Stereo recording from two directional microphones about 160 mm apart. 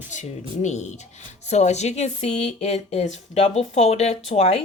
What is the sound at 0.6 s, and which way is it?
A woman's voice, 45° left (ahead or behind).